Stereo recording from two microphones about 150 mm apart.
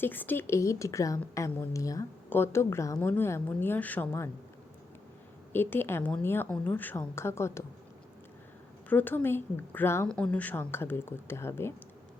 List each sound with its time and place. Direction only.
0.0 s a woman's voice: 10° left (ahead or behind)
5.5 s a woman's voice: 15° left (ahead or behind)
8.9 s a woman's voice: 10° left (ahead or behind)